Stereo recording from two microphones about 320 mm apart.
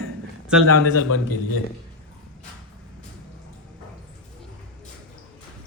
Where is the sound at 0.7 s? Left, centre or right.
Left.